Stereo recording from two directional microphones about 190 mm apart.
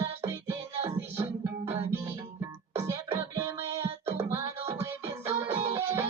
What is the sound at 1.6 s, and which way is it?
Music, 15° right (ahead or behind).